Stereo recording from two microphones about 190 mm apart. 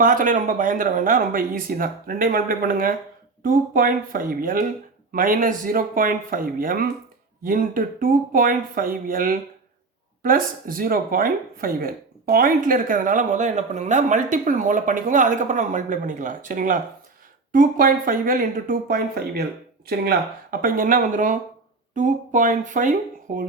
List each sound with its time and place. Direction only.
0.0 s speech: 45° right (ahead or behind)